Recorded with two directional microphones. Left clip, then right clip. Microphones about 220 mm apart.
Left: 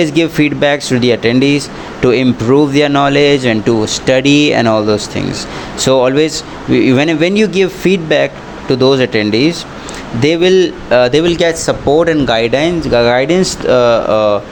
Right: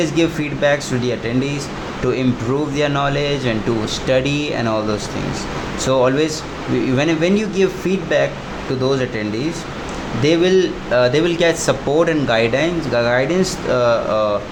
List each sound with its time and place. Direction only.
0.0 s speech: 35° left (ahead or behind)